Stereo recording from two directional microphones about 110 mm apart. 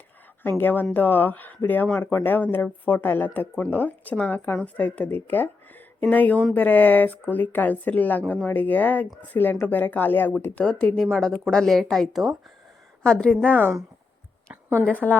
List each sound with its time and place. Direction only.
0.6 s a woman's voice: 15° left (ahead or behind)
13.5 s speech: 15° right (ahead or behind)
14.5 s a sound: 25° right (ahead or behind)
14.8 s speech: 15° left (ahead or behind)